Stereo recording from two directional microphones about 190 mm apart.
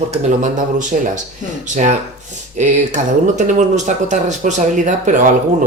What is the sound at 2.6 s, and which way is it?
Speech, 40° right (ahead or behind).